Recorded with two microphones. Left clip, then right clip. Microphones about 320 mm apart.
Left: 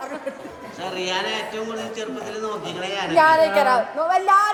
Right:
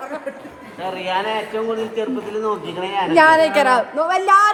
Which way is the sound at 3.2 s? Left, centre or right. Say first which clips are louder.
Right 3 dB; right.